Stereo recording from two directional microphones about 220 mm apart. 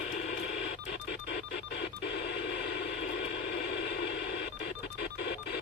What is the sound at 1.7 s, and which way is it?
Telephone dialing, 50° left (ahead or behind).